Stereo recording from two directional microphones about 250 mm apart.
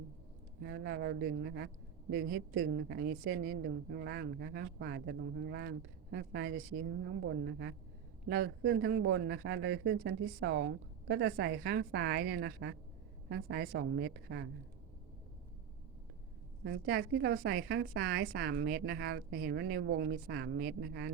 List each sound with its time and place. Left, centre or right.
0.6 s a man's voice: right
16.6 s a woman's voice: right